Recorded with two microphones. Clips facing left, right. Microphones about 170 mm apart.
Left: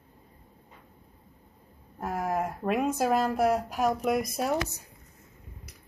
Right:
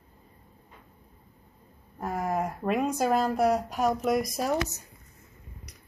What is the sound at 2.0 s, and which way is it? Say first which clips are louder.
Speech: even; centre (ahead or behind).